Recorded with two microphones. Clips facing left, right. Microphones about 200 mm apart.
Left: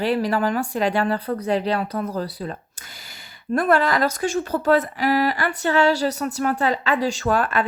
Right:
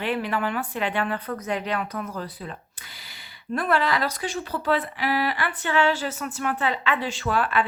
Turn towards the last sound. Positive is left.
turn(degrees=45)  # may be behind; listen again after turning